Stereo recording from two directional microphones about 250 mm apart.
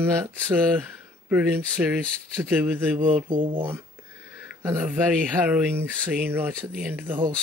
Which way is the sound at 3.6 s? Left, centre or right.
Centre.